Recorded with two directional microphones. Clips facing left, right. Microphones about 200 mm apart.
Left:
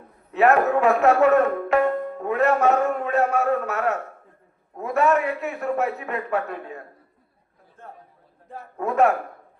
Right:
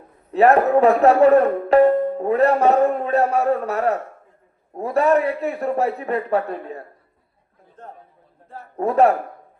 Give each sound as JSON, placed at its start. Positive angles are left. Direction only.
{"t": 0.3, "sound": "speech", "side_deg": -35}
{"t": 8.8, "sound": "speech", "side_deg": -35}